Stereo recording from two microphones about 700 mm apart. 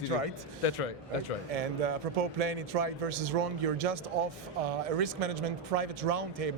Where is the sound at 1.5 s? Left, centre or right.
Right.